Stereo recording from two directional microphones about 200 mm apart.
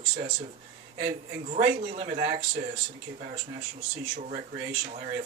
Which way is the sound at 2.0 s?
25° right (ahead or behind).